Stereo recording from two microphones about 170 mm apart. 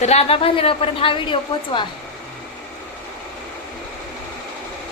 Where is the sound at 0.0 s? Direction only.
40° left (ahead or behind).